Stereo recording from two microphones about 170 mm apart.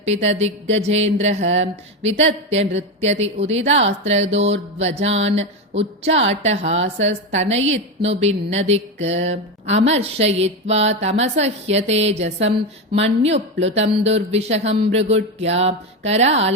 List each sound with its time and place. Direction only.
0.0 s speech: 40° right (ahead or behind)
2.5 s speech: 40° right (ahead or behind)